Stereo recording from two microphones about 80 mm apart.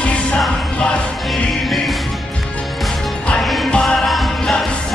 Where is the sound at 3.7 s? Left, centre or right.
Centre.